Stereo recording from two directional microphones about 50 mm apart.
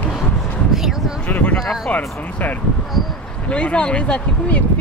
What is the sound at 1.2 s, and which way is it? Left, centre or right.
Speech, left.